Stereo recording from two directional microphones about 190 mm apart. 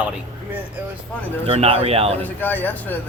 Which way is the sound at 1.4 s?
35° right (ahead or behind).